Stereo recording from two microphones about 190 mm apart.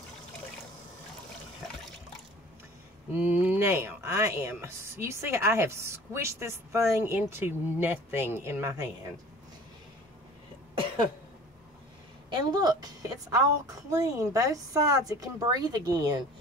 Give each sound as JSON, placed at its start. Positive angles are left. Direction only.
{"t": 3.1, "sound": "speech", "side_deg": -10}
{"t": 12.3, "sound": "speech", "side_deg": -20}